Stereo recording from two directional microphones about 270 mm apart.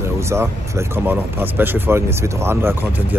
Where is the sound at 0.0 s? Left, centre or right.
Centre.